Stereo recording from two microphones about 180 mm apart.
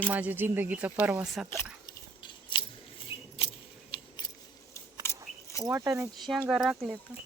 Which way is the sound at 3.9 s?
30° left (ahead or behind).